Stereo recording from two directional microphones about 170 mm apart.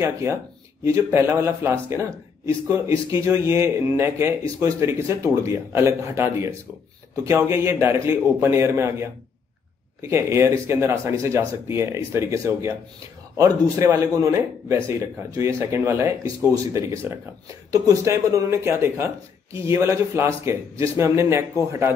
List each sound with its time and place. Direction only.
0.0 s speech: 15° right (ahead or behind)